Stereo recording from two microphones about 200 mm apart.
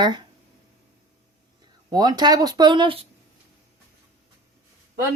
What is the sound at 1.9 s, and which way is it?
Speech, 20° right (ahead or behind).